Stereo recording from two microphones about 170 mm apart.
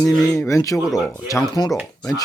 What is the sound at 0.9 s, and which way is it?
Speech, centre (ahead or behind).